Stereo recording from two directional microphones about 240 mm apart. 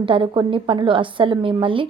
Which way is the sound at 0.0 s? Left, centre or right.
Right.